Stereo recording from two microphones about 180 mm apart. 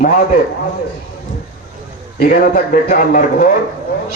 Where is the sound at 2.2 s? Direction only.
50° left (ahead or behind).